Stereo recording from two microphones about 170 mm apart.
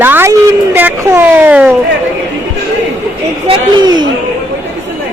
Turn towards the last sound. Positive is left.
turn(degrees=-25)  # may be behind; listen again after turning